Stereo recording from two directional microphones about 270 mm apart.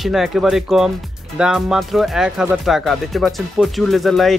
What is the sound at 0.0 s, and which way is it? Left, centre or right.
Speech, centre.